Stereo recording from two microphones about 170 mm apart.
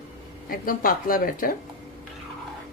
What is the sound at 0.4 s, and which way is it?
A woman's voice, 55° left (ahead or behind).